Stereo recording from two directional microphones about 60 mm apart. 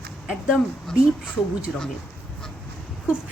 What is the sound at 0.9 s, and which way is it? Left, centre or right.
Speech, centre.